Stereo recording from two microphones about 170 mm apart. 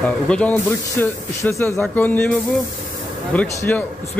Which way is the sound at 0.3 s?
10° left (ahead or behind).